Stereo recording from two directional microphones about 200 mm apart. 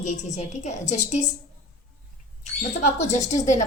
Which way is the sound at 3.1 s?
35° left (ahead or behind).